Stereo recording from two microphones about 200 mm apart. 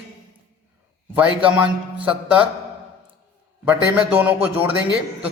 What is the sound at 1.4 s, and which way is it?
Speech, 5° right (ahead or behind).